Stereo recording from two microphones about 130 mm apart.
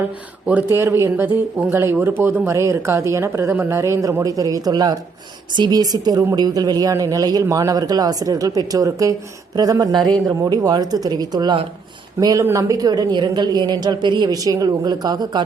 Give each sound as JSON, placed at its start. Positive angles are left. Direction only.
{"t": 0.4, "sound": "a woman's voice", "side_deg": -15}